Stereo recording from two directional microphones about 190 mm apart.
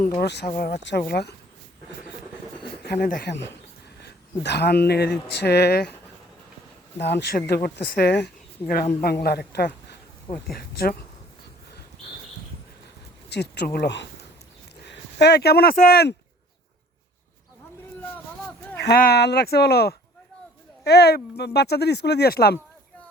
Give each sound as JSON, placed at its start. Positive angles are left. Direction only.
{"t": 0.2, "sound": "speech", "side_deg": 60}
{"t": 2.8, "sound": "speech", "side_deg": 55}
{"t": 7.0, "sound": "speech", "side_deg": 65}
{"t": 13.3, "sound": "speech", "side_deg": 60}
{"t": 18.8, "sound": "speech", "side_deg": 55}